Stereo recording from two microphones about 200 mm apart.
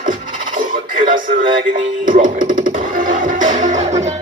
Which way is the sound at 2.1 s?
45° right (ahead or behind).